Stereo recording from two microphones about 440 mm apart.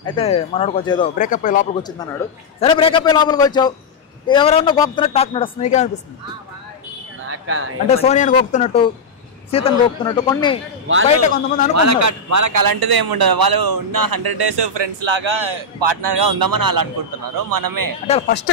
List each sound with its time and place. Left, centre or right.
0.0 s speech: centre
7.2 s a sound: right
7.9 s speech: centre
11.7 s a man's voice: right
18.0 s speech: centre